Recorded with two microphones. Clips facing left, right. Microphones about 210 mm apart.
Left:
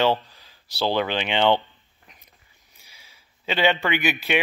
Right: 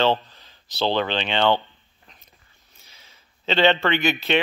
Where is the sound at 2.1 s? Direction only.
15° left (ahead or behind).